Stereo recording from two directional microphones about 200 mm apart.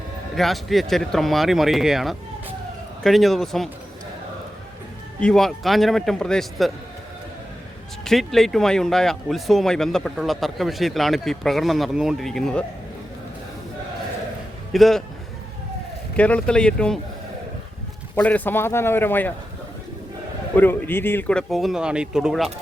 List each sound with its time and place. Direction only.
0.3 s speech: centre (ahead or behind)
5.2 s speech: centre (ahead or behind)
8.0 s speech: centre (ahead or behind)
14.7 s speech: centre (ahead or behind)
16.1 s speech: 5° left (ahead or behind)
18.1 s a man's voice: 5° left (ahead or behind)
20.6 s speech: 10° left (ahead or behind)